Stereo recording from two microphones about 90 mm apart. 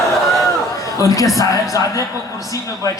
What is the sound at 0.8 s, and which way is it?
A man's voice, 40° left (ahead or behind).